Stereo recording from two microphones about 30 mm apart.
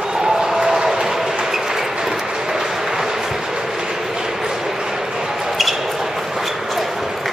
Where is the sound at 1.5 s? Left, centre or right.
Centre.